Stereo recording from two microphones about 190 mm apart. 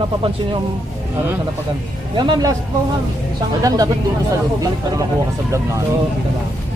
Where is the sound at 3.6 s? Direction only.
20° right (ahead or behind).